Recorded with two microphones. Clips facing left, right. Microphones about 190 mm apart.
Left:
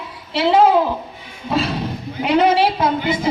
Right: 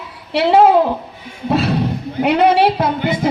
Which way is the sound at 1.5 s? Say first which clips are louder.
Right 4 dB; 60° right (ahead or behind).